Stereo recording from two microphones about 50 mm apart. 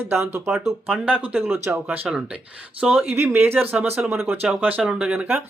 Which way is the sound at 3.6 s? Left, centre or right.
Right.